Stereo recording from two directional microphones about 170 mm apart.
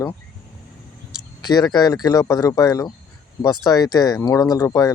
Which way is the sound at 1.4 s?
25° left (ahead or behind).